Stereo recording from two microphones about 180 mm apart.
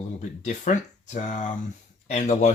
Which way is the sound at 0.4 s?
45° left (ahead or behind).